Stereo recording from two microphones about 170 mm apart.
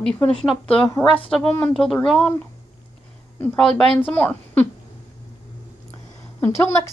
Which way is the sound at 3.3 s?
5° left (ahead or behind).